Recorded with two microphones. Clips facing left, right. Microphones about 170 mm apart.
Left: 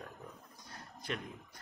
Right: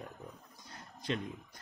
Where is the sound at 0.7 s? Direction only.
20° right (ahead or behind).